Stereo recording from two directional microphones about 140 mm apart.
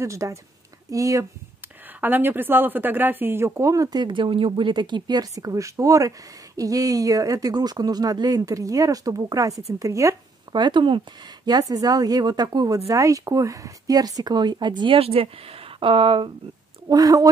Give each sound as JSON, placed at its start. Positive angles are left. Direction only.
{"t": 0.0, "sound": "a woman's voice", "side_deg": -20}
{"t": 2.0, "sound": "a woman's voice", "side_deg": -15}
{"t": 16.9, "sound": "a woman's voice", "side_deg": -25}